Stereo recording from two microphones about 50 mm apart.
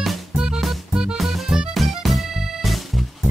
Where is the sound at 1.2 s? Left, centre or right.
Centre.